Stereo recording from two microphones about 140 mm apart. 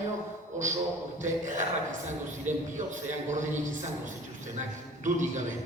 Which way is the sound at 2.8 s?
60° right (ahead or behind).